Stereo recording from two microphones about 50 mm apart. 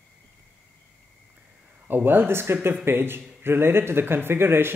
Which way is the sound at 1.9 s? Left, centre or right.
Right.